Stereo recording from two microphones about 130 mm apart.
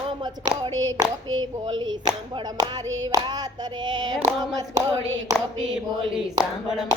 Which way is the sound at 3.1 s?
25° right (ahead or behind).